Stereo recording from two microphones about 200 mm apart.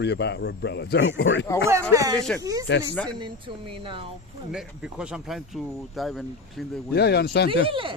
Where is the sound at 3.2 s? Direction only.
25° right (ahead or behind).